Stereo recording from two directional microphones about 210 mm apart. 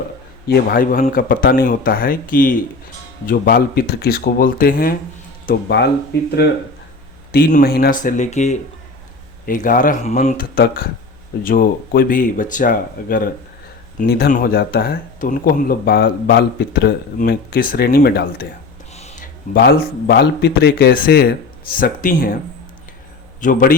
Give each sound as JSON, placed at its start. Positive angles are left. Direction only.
{"t": 0.4, "sound": "speech", "side_deg": 45}
{"t": 7.3, "sound": "speech", "side_deg": 45}
{"t": 18.9, "sound": "a sound", "side_deg": 30}
{"t": 19.5, "sound": "speech", "side_deg": 50}
{"t": 23.4, "sound": "speech", "side_deg": 35}